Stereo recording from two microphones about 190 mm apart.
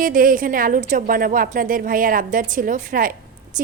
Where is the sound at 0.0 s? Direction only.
45° right (ahead or behind).